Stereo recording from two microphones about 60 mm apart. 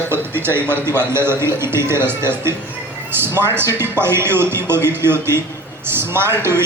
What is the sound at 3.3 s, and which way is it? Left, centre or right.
A man's voice, right.